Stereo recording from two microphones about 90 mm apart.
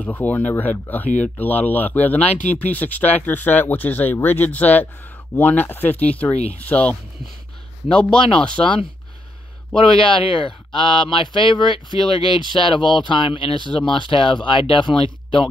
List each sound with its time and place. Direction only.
0.0 s speech: 20° left (ahead or behind)
9.8 s speech: 70° left (ahead or behind)